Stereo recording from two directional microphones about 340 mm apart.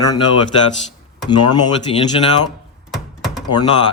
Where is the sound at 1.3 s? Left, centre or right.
Centre.